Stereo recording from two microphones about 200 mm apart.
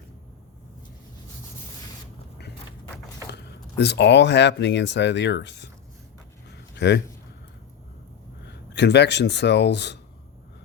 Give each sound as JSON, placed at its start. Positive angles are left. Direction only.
{"t": 3.2, "sound": "speech", "side_deg": 55}
{"t": 6.7, "sound": "speech", "side_deg": 60}
{"t": 8.4, "sound": "speech", "side_deg": 60}